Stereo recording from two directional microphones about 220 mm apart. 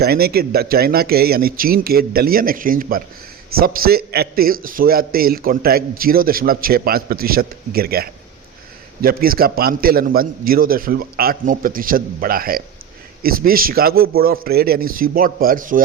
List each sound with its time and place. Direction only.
0.0 s a man's voice: 45° right (ahead or behind)